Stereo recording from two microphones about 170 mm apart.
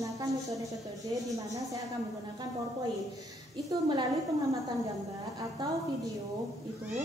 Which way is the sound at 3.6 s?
25° right (ahead or behind).